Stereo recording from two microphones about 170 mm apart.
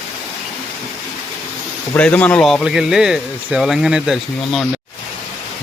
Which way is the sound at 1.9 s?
10° left (ahead or behind).